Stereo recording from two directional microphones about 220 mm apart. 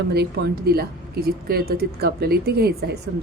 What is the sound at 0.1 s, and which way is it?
A woman's voice, 45° right (ahead or behind).